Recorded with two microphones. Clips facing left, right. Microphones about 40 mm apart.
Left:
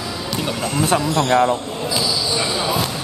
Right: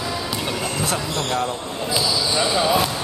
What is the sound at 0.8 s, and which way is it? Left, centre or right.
Speech, left.